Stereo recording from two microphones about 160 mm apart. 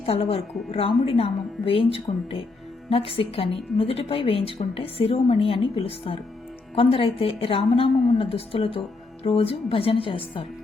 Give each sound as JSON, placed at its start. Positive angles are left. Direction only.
{"t": 0.0, "sound": "a woman's voice", "side_deg": 35}